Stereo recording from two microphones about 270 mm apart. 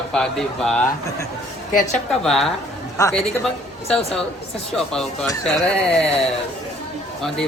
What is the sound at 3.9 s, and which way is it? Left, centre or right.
Speech, left.